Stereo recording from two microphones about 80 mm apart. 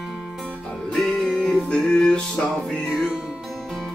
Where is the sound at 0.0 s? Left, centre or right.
Centre.